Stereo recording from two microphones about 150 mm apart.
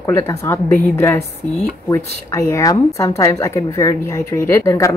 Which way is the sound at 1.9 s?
20° left (ahead or behind).